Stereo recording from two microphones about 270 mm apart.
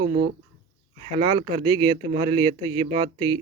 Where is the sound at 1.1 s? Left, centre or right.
Centre.